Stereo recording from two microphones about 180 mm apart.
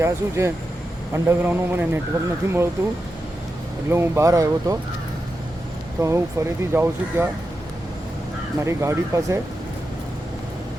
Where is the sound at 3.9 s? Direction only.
15° right (ahead or behind).